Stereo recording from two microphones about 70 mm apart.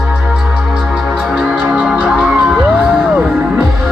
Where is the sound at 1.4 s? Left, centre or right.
Right.